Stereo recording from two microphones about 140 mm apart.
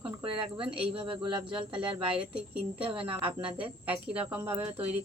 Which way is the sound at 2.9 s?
40° right (ahead or behind).